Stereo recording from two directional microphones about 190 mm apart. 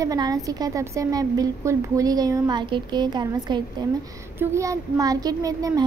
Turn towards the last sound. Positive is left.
turn(degrees=-20)  # may be behind; listen again after turning